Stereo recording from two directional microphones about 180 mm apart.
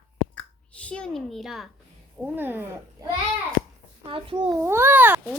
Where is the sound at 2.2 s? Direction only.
10° right (ahead or behind).